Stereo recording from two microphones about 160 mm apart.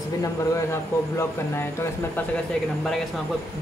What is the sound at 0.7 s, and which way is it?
Speech, 15° left (ahead or behind).